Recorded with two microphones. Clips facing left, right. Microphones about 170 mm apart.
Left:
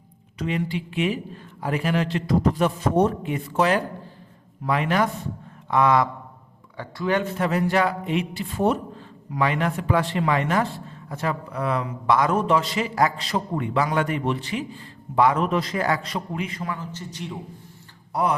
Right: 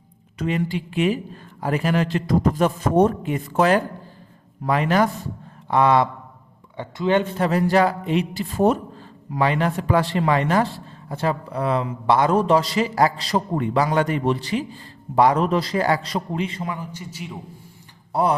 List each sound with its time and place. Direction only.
0.3 s a man's voice: 40° right (ahead or behind)
16.7 s a man's voice: 10° right (ahead or behind)
18.1 s speech: 30° right (ahead or behind)